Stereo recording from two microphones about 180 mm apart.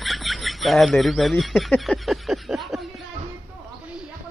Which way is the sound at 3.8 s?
5° right (ahead or behind).